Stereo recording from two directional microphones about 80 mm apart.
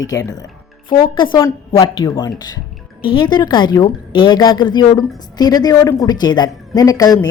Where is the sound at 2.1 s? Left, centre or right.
Left.